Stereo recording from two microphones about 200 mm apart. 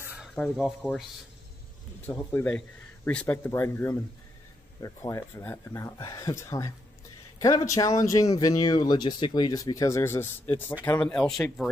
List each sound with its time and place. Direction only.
0.1 s a sound: 5° right (ahead or behind)
0.4 s speech: 5° left (ahead or behind)
2.0 s speech: 10° left (ahead or behind)